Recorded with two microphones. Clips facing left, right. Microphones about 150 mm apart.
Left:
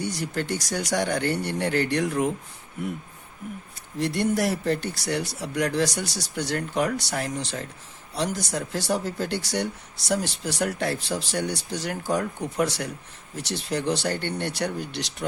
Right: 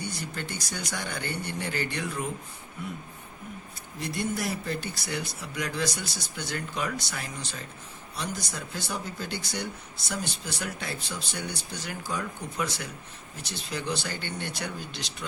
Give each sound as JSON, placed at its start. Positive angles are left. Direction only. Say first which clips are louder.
{"t": 0.0, "sound": "speech", "louder": "left 7 dB", "side_deg": 85}
{"t": 3.9, "sound": "speech", "louder": "left 7 dB", "side_deg": 80}